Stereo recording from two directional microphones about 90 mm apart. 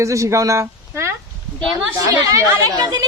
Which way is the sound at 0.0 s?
35° right (ahead or behind).